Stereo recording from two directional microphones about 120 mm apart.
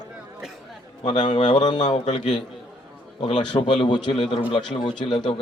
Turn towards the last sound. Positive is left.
turn(degrees=40)  # may be behind; listen again after turning